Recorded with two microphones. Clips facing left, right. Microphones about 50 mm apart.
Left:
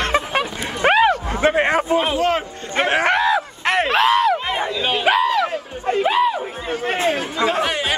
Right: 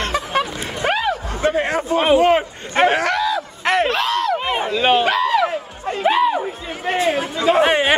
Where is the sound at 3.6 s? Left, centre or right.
Centre.